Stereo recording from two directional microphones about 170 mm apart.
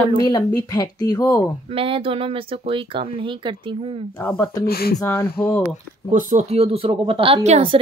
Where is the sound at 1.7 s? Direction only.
35° right (ahead or behind).